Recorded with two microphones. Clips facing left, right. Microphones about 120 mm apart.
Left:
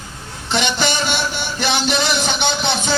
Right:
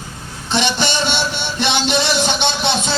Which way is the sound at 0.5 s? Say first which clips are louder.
Right 1 dB; 25° right (ahead or behind).